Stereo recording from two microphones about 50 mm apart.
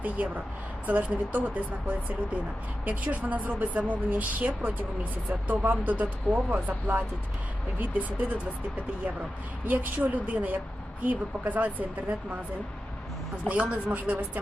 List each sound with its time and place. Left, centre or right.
0.0 s speech: right
9.6 s speech: right
13.5 s speech: right